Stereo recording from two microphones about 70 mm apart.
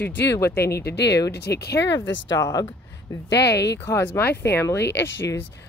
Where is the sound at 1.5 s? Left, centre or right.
Left.